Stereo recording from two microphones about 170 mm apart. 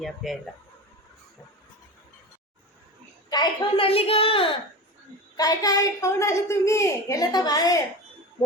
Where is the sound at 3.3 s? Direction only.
30° left (ahead or behind).